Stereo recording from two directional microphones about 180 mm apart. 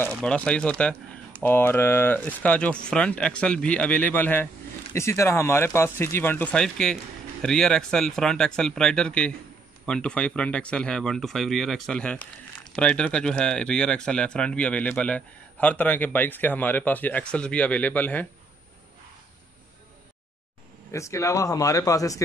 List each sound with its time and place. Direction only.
0.0 s speech: 5° left (ahead or behind)
20.9 s speech: 15° left (ahead or behind)